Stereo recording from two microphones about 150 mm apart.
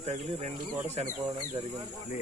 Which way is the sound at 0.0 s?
45° right (ahead or behind).